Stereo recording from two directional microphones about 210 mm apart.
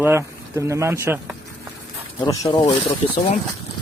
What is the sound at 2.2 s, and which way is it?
Speech, 20° left (ahead or behind).